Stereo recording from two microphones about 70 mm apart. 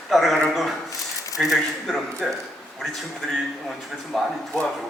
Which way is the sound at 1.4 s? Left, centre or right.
Centre.